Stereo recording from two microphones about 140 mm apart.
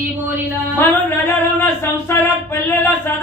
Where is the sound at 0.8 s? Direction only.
15° left (ahead or behind).